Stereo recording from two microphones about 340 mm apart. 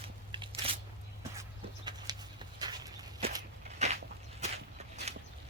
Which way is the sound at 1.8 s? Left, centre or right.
Centre.